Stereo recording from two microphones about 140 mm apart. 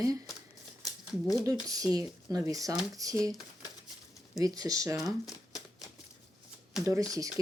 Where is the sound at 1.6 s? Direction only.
25° right (ahead or behind).